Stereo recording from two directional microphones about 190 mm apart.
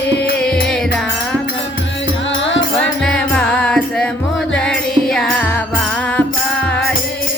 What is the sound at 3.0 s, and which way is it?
Music, 5° left (ahead or behind).